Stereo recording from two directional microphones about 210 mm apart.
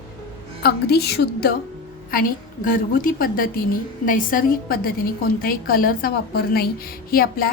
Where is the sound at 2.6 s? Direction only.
40° left (ahead or behind).